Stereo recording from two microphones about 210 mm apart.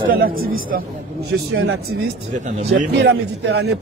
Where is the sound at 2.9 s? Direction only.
55° right (ahead or behind).